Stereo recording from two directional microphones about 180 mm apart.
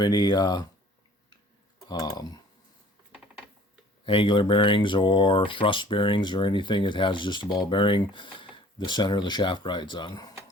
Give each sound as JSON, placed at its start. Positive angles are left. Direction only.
{"t": 0.0, "sound": "speech", "side_deg": 25}
{"t": 1.9, "sound": "speech", "side_deg": 20}
{"t": 4.0, "sound": "speech", "side_deg": 30}